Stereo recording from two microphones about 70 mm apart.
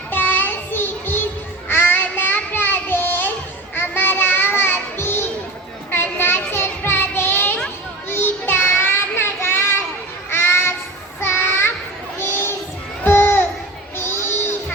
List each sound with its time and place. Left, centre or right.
0.1 s child singing: left
10.2 s a sound: left
11.2 s child singing: left
12.2 s crowd: left
13.1 s a sound: left
13.9 s music: left